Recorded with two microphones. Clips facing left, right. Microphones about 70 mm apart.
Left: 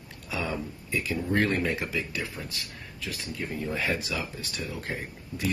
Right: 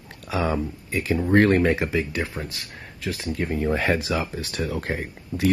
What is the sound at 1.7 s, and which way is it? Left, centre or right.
Speech, right.